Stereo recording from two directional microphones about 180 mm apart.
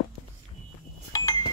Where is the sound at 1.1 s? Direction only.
20° left (ahead or behind).